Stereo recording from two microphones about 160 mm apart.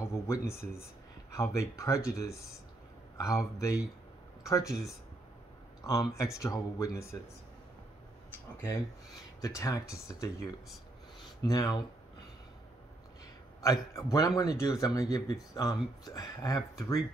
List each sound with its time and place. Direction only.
0.0 s speech: 20° left (ahead or behind)
5.8 s speech: 20° left (ahead or behind)
9.4 s speech: 20° left (ahead or behind)
13.6 s speech: 20° left (ahead or behind)